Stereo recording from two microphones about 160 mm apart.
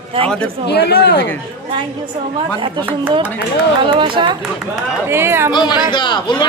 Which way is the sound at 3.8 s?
30° right (ahead or behind).